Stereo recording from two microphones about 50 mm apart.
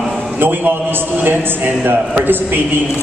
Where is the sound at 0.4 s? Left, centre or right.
Right.